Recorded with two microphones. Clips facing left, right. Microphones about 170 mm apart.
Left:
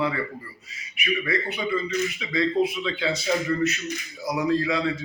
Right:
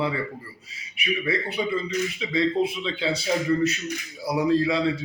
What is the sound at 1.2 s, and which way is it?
A man's voice, 30° right (ahead or behind).